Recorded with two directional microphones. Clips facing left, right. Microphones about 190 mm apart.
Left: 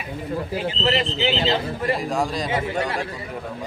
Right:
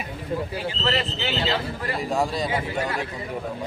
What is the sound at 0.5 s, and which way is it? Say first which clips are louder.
Speech: left 7 dB; 20° left (ahead or behind).